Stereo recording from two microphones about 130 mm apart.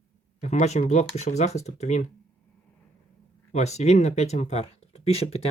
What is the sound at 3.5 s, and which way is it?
Speech, 60° left (ahead or behind).